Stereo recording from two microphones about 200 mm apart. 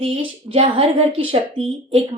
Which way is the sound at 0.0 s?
30° right (ahead or behind).